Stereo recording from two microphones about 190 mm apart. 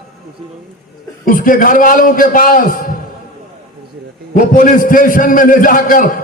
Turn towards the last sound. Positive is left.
turn(degrees=45)  # may be behind; listen again after turning